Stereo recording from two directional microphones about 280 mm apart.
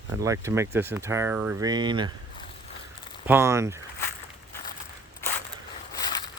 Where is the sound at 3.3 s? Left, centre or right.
Centre.